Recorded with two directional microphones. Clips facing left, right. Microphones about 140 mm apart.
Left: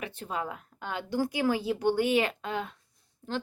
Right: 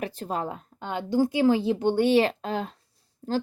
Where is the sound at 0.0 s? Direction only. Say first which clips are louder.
Right 5 dB; 40° right (ahead or behind).